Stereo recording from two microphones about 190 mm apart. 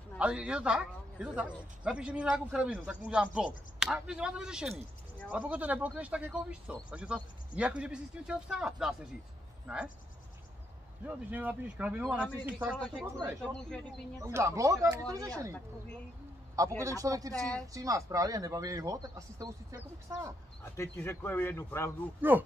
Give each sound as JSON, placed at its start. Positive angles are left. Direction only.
{"t": 0.2, "sound": "speech", "side_deg": -5}
{"t": 11.1, "sound": "speech", "side_deg": -10}
{"t": 13.4, "sound": "speech", "side_deg": 5}
{"t": 14.2, "sound": "speech", "side_deg": -15}
{"t": 16.5, "sound": "speech", "side_deg": -15}
{"t": 17.3, "sound": "speech", "side_deg": 5}
{"t": 17.7, "sound": "speech", "side_deg": -15}
{"t": 20.6, "sound": "speech", "side_deg": 15}
{"t": 22.2, "sound": "speech", "side_deg": -10}